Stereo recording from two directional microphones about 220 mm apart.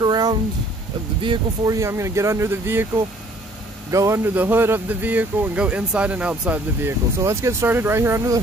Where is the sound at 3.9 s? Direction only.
15° right (ahead or behind).